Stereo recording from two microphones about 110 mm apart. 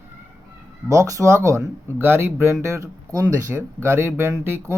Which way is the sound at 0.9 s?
30° right (ahead or behind).